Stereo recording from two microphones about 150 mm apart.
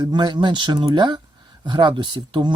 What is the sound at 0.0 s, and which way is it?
Speech, 30° right (ahead or behind).